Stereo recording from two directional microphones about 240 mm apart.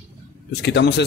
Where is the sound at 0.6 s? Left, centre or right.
Left.